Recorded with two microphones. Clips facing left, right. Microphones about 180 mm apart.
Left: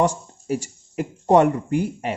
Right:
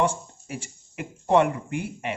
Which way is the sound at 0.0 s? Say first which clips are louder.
Left 4 dB; 40° left (ahead or behind).